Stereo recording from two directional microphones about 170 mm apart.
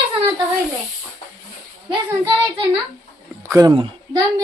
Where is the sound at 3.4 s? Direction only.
20° right (ahead or behind).